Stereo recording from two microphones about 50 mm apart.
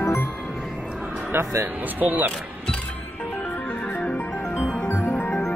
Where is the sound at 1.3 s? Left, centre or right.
Right.